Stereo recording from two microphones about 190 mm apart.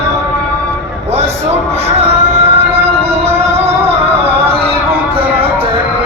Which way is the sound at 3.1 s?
35° right (ahead or behind).